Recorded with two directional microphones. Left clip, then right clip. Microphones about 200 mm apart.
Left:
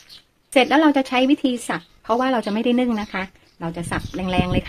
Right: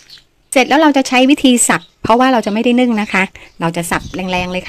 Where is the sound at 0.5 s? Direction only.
30° right (ahead or behind).